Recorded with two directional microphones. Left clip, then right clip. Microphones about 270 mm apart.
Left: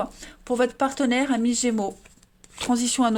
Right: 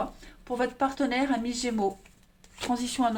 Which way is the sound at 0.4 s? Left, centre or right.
Left.